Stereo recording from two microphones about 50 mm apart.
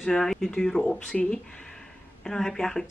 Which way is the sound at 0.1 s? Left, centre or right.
Centre.